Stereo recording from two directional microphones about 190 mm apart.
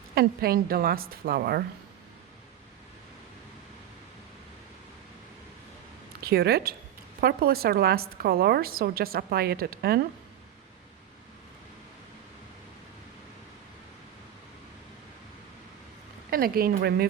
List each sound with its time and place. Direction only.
0.1 s a woman's voice: 55° right (ahead or behind)
6.2 s a woman's voice: 55° right (ahead or behind)
16.3 s a woman's voice: 50° right (ahead or behind)